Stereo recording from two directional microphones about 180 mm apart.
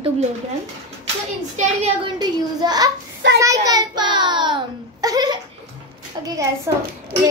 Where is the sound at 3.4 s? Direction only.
20° right (ahead or behind).